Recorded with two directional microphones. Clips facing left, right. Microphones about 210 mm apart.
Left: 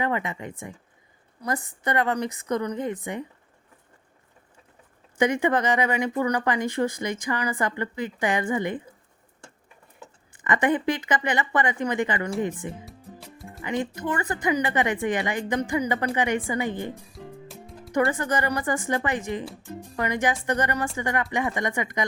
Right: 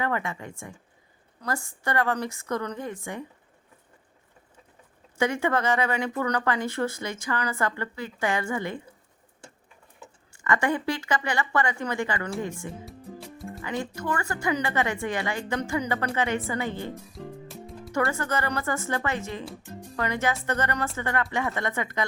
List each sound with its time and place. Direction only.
0.0 s speech: 20° left (ahead or behind)
5.1 s speech: 15° left (ahead or behind)
10.3 s speech: 20° left (ahead or behind)
12.8 s music: centre (ahead or behind)
13.6 s speech: 20° left (ahead or behind)
16.9 s music: centre (ahead or behind)
17.9 s speech: 15° left (ahead or behind)